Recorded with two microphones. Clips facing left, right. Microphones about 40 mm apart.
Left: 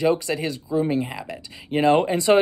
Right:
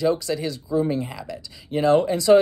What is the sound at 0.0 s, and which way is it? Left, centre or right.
Speech, left.